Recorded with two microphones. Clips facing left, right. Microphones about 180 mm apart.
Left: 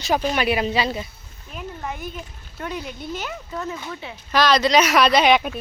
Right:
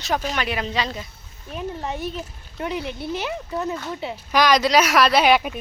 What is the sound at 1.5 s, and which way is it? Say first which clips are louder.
Speech: right 3 dB; 25° right (ahead or behind).